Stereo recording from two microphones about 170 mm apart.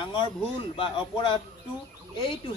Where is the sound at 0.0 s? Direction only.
30° left (ahead or behind).